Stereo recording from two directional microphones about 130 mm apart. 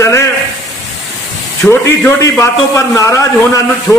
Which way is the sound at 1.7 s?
20° left (ahead or behind).